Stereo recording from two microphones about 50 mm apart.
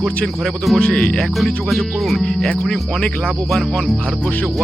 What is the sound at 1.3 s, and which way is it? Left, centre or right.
Speech, centre.